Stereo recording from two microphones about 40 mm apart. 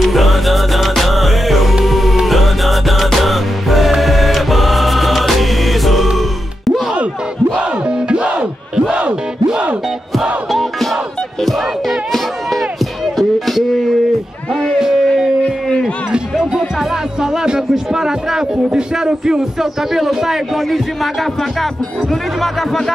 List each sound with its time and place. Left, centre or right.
0.0 s music: centre
7.8 s music: right
10.5 s battle cry: centre
11.4 s music: centre
14.8 s howl: centre
16.1 s music: centre
17.5 s a sound: centre
18.7 s a sound: right
20.5 s speech: centre